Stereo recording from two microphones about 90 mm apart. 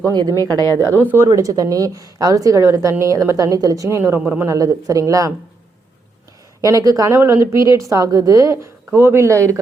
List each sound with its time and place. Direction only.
0.1 s a woman's voice: 50° right (ahead or behind)
0.8 s speech: 25° right (ahead or behind)
1.3 s a woman's voice: 40° right (ahead or behind)
4.4 s a woman's voice: 40° right (ahead or behind)
6.6 s a woman's voice: 40° right (ahead or behind)
8.9 s a woman's voice: 25° right (ahead or behind)